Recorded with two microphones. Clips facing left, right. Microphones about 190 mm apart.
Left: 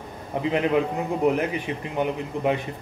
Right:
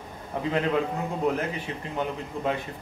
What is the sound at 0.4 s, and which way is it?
A man's voice, 15° left (ahead or behind).